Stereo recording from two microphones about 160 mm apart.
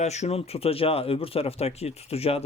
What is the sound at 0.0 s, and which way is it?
Speech, 45° left (ahead or behind).